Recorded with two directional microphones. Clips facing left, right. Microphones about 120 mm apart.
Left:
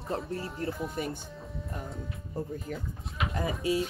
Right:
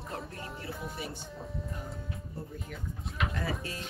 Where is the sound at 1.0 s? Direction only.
50° left (ahead or behind).